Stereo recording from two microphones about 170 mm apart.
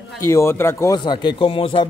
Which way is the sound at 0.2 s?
15° left (ahead or behind).